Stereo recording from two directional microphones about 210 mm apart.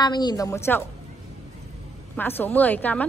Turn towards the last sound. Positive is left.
turn(degrees=10)  # may be behind; listen again after turning